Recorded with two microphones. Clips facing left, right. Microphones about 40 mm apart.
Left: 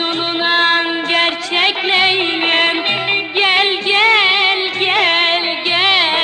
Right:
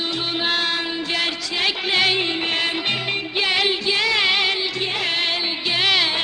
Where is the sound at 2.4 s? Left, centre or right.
Left.